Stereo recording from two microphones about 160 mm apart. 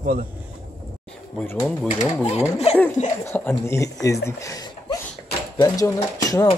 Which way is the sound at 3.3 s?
15° left (ahead or behind).